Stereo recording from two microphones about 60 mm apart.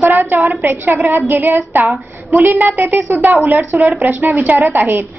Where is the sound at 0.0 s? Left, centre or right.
Right.